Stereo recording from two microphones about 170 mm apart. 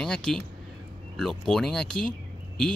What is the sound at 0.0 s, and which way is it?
Speech, 5° left (ahead or behind).